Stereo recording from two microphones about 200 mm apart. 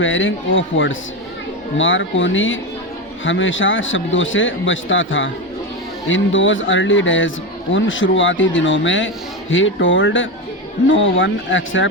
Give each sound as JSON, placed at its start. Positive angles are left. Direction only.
{"t": 0.0, "sound": "a man's voice", "side_deg": 70}